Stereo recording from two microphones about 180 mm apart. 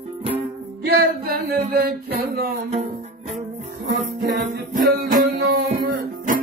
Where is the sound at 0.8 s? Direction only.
55° right (ahead or behind).